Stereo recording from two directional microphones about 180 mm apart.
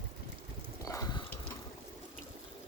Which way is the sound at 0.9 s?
20° left (ahead or behind).